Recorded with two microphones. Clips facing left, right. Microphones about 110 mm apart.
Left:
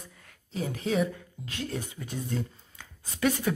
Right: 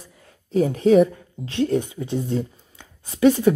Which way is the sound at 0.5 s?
45° right (ahead or behind).